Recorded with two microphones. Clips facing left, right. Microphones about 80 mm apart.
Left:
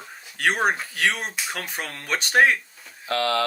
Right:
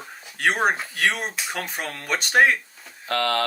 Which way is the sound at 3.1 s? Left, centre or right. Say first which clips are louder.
Even; right.